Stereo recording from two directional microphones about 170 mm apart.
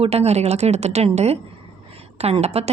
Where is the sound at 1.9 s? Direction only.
35° right (ahead or behind).